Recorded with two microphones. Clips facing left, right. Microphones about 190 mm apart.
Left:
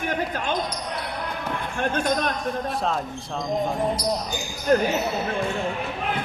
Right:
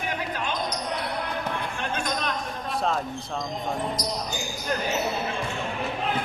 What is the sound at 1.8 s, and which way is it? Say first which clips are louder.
Speech: left 8 dB; 50° left (ahead or behind).